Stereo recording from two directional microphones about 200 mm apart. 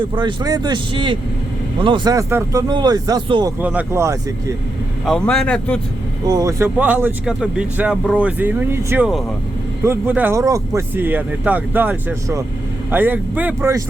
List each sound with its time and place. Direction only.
0.2 s speech: 20° right (ahead or behind)
3.6 s speech: 10° right (ahead or behind)
5.0 s a man's voice: 5° left (ahead or behind)
6.2 s speech: 20° right (ahead or behind)